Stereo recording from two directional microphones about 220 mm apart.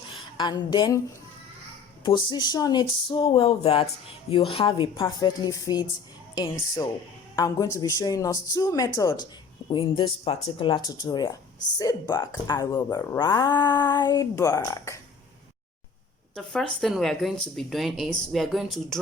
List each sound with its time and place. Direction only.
0.3 s speech: 20° left (ahead or behind)
2.0 s speech: 20° left (ahead or behind)
16.3 s speech: centre (ahead or behind)